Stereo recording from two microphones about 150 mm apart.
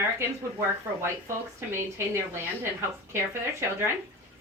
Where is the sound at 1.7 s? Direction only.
15° right (ahead or behind).